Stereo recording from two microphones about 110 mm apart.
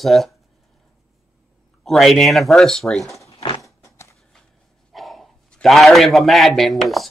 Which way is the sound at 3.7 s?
25° left (ahead or behind).